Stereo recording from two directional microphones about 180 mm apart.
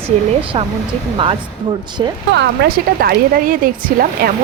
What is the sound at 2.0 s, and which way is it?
Speech, 25° right (ahead or behind).